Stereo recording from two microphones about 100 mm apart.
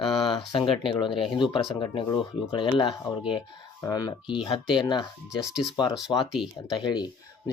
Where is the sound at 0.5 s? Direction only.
60° left (ahead or behind).